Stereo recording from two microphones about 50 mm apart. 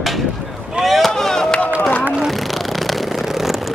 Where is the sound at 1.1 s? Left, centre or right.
Centre.